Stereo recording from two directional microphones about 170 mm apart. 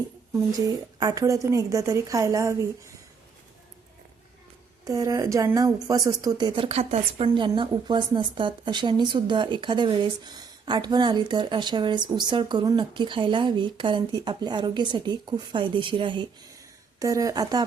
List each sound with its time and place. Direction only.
0.3 s a woman's voice: 20° right (ahead or behind)
4.9 s a woman's voice: 20° right (ahead or behind)